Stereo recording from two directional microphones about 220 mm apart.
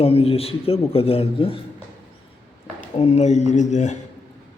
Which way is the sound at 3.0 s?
30° left (ahead or behind).